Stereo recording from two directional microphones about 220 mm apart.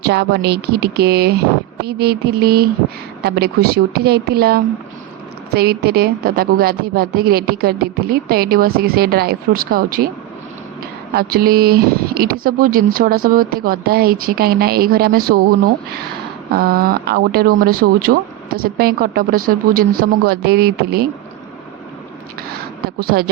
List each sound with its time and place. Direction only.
0.0 s speech: 50° right (ahead or behind)
11.1 s speech: 45° right (ahead or behind)
23.0 s speech: 45° right (ahead or behind)